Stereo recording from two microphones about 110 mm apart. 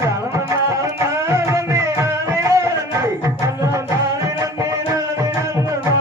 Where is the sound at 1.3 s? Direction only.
25° right (ahead or behind).